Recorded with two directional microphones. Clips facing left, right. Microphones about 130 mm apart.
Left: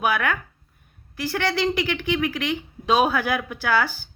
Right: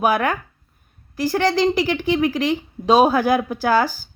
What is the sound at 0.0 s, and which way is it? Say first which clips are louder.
A woman's voice: right 4 dB; 40° right (ahead or behind).